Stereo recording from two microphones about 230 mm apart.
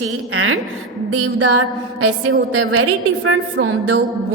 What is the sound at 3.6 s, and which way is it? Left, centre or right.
Speech, right.